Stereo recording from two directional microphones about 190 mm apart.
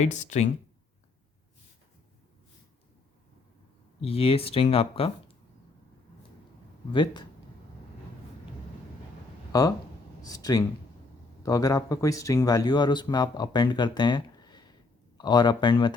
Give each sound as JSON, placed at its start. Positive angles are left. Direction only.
{"t": 0.0, "sound": "speech", "side_deg": 35}
{"t": 4.0, "sound": "speech", "side_deg": 30}
{"t": 6.9, "sound": "speech", "side_deg": 25}
{"t": 9.5, "sound": "speech", "side_deg": 20}